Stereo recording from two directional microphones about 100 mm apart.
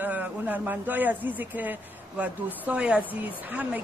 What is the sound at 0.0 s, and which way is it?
A man's voice, 15° right (ahead or behind).